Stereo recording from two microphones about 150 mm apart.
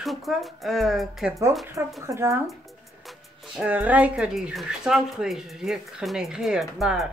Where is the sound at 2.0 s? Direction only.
20° right (ahead or behind).